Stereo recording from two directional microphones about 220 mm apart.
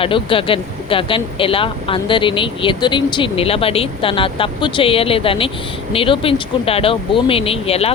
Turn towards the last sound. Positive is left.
turn(degrees=25)  # may be behind; listen again after turning